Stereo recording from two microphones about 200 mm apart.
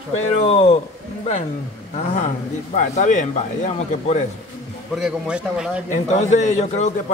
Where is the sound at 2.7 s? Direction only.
35° left (ahead or behind).